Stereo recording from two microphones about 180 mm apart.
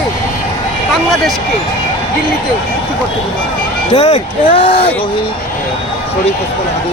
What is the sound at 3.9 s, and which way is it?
Speech, 40° left (ahead or behind).